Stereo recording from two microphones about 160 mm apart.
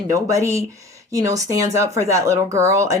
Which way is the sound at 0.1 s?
20° right (ahead or behind).